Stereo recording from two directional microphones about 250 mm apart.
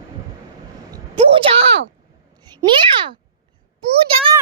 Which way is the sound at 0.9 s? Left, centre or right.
Right.